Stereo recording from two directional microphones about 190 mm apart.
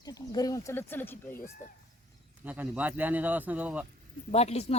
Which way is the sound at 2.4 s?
10° right (ahead or behind).